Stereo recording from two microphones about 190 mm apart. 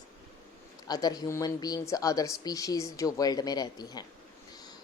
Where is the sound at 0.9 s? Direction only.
20° left (ahead or behind).